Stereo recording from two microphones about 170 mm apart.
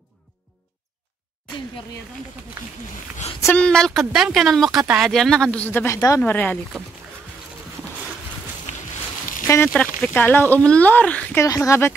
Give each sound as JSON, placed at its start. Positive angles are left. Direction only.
{"t": 3.4, "sound": "speech", "side_deg": 5}
{"t": 9.8, "sound": "speech", "side_deg": 10}
{"t": 11.4, "sound": "speech", "side_deg": 20}